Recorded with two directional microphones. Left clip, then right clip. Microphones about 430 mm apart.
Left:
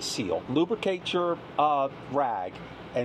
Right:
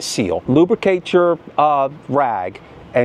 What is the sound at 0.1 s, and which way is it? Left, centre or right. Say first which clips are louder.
Speech: right 12 dB; right.